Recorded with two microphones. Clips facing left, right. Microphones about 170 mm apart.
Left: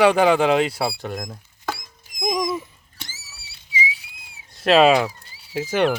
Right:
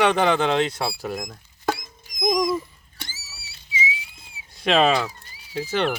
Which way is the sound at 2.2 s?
Centre (ahead or behind).